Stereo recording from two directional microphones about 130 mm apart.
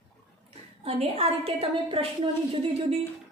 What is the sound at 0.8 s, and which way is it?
A woman's voice, 50° right (ahead or behind).